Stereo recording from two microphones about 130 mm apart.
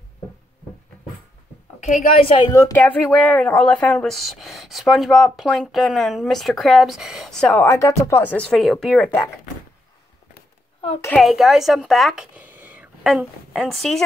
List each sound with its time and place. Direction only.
1.8 s a woman's voice: 70° left (ahead or behind)
2.5 s speech: 20° left (ahead or behind)
7.6 s speech: 25° left (ahead or behind); by 9.1 s 5° left (ahead or behind)
11.1 s speech: centre (ahead or behind)
12.4 s a woman's voice: 15° right (ahead or behind)